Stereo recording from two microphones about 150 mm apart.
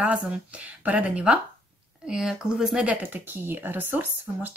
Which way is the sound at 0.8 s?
10° right (ahead or behind).